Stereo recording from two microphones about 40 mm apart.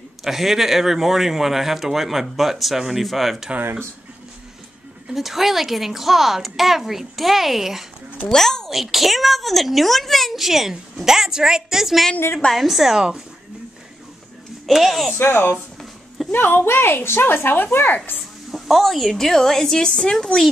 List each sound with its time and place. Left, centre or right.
0.2 s speech: centre
5.1 s speech: centre
8.3 s a woman's voice: centre
8.6 s speech: centre
14.7 s speech: centre
15.1 s a woman's voice: left
18.5 s a woman's voice: centre